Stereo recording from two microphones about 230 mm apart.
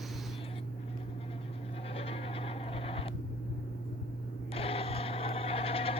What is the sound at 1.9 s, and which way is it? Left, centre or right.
Goat, left.